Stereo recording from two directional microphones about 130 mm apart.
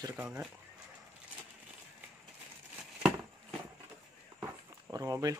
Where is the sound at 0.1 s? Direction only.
10° right (ahead or behind).